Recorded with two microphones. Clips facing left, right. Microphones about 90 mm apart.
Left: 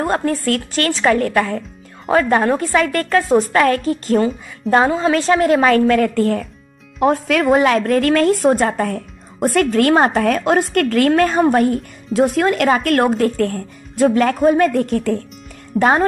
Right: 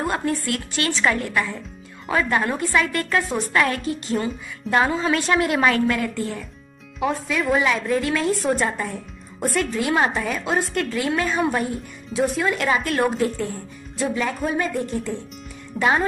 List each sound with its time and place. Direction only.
0.0 s a woman's voice: 40° left (ahead or behind)
2.0 s a woman's voice: 35° left (ahead or behind); by 8.5 s 60° left (ahead or behind)
8.5 s a woman's voice: 45° left (ahead or behind)
8.8 s a woman's voice: 70° left (ahead or behind)
9.9 s a woman's voice: 45° left (ahead or behind)
10.2 s a woman's voice: 60° left (ahead or behind)
11.3 s a woman's voice: 40° left (ahead or behind)
11.6 s a woman's voice: 60° left (ahead or behind)
14.7 s speech: 75° left (ahead or behind)
15.7 s a woman's voice: 30° left (ahead or behind)